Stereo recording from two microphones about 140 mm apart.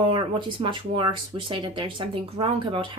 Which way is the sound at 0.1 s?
35° right (ahead or behind).